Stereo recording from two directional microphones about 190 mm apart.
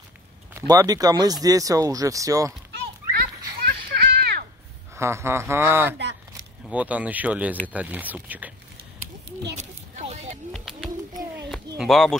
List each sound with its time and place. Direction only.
0.6 s speech: 20° right (ahead or behind)
3.6 s children playing: 55° right (ahead or behind)
4.9 s speech: 15° right (ahead or behind)
9.6 s a sound: 35° right (ahead or behind)
10.5 s bird: centre (ahead or behind)
11.8 s speech: centre (ahead or behind)